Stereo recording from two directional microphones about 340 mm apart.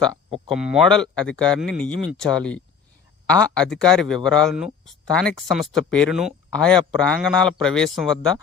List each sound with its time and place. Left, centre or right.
0.0 s speech: centre